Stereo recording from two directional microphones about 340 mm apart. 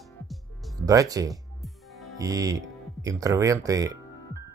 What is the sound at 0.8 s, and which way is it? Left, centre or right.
Speech, centre.